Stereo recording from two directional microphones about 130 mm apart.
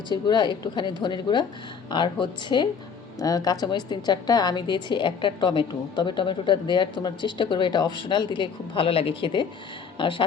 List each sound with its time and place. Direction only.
0.1 s a woman's voice: 35° left (ahead or behind)